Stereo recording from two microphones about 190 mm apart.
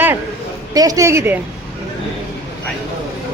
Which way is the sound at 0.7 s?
20° right (ahead or behind).